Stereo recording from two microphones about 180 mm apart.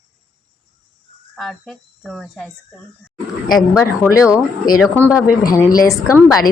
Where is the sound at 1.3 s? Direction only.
Centre (ahead or behind).